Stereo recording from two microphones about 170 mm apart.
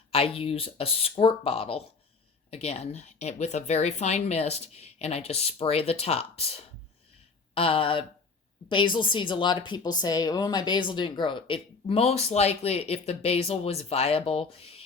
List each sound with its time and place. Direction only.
0.1 s a woman's voice: 35° left (ahead or behind)
7.5 s a woman's voice: 35° left (ahead or behind)